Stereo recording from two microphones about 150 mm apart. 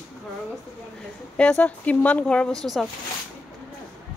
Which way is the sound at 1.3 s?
5° left (ahead or behind).